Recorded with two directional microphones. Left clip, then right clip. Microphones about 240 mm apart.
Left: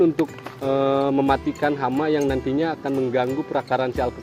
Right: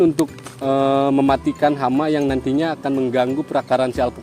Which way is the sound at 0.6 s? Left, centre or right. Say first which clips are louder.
Right 3 dB; right.